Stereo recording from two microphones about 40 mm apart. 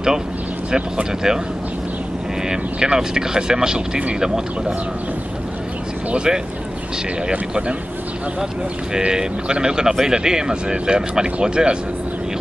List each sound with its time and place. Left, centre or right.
0.7 s speech: right
2.5 s speech: centre
6.1 s speech: centre
8.9 s speech: centre